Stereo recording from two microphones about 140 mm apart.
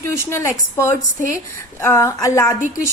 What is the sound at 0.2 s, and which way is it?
A woman's voice, 20° left (ahead or behind).